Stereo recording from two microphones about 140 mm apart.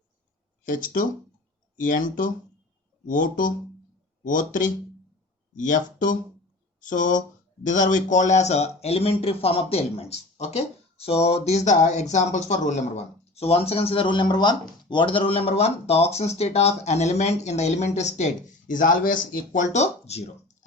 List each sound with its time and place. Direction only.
0.6 s speech: 70° left (ahead or behind); by 20.2 s 50° left (ahead or behind)